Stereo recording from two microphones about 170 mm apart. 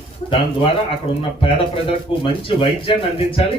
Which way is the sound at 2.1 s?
30° left (ahead or behind).